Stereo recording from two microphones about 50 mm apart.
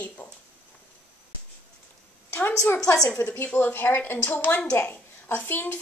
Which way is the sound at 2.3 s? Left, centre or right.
Left.